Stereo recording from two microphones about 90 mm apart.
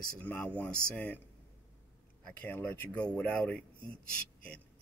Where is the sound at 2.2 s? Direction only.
15° left (ahead or behind).